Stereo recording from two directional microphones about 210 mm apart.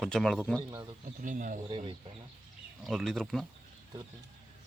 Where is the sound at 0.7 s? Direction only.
20° right (ahead or behind).